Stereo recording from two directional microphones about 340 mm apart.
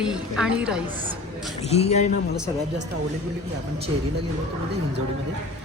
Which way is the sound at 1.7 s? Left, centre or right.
Centre.